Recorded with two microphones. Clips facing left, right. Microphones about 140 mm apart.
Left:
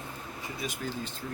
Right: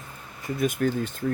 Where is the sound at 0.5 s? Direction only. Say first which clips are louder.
Right 12 dB; 50° right (ahead or behind).